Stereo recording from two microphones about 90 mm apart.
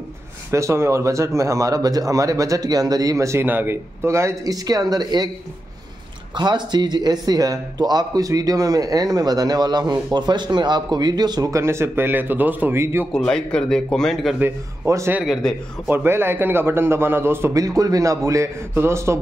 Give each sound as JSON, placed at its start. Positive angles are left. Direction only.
{"t": 0.5, "sound": "speech", "side_deg": -30}
{"t": 3.4, "sound": "speech", "side_deg": -20}
{"t": 6.3, "sound": "a man's voice", "side_deg": -55}
{"t": 11.5, "sound": "a man's voice", "side_deg": -30}
{"t": 13.1, "sound": "a man's voice", "side_deg": 10}
{"t": 14.4, "sound": "a man's voice", "side_deg": -30}
{"t": 15.4, "sound": "a man's voice", "side_deg": 5}
{"t": 15.9, "sound": "a man's voice", "side_deg": -25}
{"t": 17.6, "sound": "speech", "side_deg": -40}